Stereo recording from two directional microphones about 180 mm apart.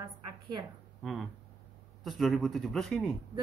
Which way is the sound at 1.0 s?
Centre (ahead or behind).